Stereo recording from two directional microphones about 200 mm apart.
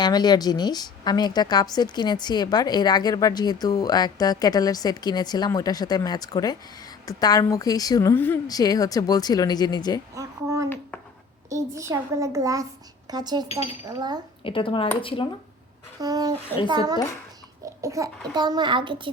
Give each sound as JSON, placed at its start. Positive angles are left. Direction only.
{"t": 0.0, "sound": "a woman's voice", "side_deg": 20}
{"t": 10.2, "sound": "a child's voice", "side_deg": -15}
{"t": 14.4, "sound": "a woman's voice", "side_deg": 25}
{"t": 16.0, "sound": "speech", "side_deg": -20}